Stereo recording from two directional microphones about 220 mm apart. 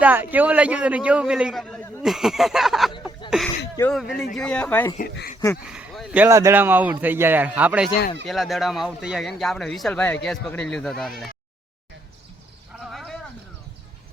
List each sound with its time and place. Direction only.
0.0 s a man's voice: 10° right (ahead or behind); by 4.9 s 10° left (ahead or behind)
4.9 s speech: 45° left (ahead or behind)
5.6 s a man's voice: 5° right (ahead or behind)
12.8 s a sound: centre (ahead or behind)